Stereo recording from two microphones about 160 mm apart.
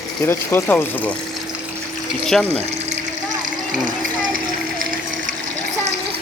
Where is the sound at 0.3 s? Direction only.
15° left (ahead or behind).